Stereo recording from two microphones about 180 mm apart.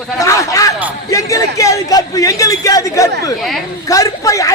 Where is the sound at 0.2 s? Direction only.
15° left (ahead or behind).